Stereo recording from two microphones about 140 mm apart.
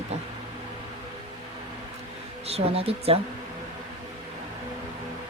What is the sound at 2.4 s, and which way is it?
Speech, 45° right (ahead or behind).